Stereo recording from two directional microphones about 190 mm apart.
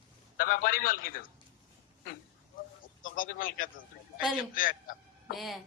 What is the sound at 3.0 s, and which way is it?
Speech, 45° left (ahead or behind).